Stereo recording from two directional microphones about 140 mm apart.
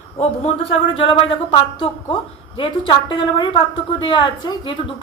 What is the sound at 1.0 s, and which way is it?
A woman's voice, 40° left (ahead or behind).